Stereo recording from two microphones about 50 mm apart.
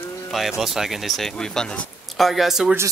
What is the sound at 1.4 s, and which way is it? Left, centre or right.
Speech, centre.